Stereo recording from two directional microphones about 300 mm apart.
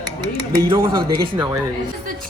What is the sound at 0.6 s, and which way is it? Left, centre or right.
A woman's voice, centre.